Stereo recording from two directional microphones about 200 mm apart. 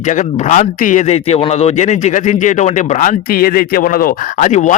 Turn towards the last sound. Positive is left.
turn(degrees=40)  # may be behind; listen again after turning